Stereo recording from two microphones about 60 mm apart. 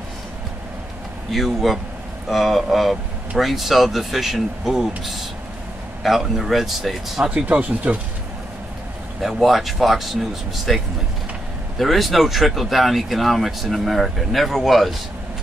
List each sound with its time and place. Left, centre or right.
1.3 s speech: centre
7.2 s speech: right
9.2 s speech: centre
11.8 s speech: centre